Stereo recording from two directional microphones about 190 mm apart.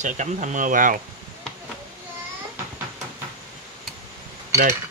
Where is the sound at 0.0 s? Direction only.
40° right (ahead or behind).